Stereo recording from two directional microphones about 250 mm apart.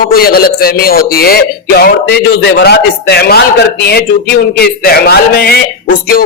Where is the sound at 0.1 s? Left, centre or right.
Left.